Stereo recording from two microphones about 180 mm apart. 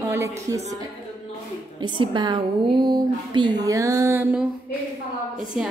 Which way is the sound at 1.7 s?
25° right (ahead or behind).